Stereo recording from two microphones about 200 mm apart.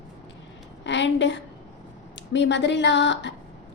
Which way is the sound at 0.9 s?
65° left (ahead or behind).